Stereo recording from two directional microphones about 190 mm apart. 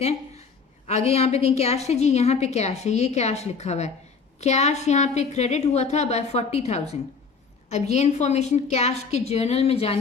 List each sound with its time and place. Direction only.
0.9 s a woman's voice: 35° left (ahead or behind)